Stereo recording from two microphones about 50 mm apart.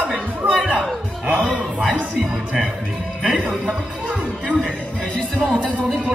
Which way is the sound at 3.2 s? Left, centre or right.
Right.